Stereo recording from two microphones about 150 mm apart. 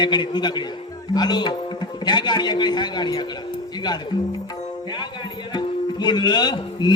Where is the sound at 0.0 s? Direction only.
30° left (ahead or behind).